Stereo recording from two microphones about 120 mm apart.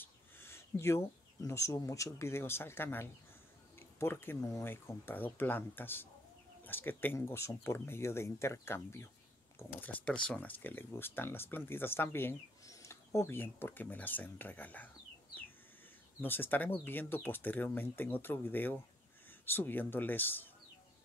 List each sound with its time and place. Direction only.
0.0 s speech: 20° left (ahead or behind)
16.2 s speech: 15° left (ahead or behind)